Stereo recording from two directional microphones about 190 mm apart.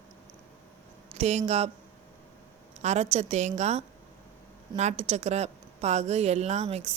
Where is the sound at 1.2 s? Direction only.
35° right (ahead or behind).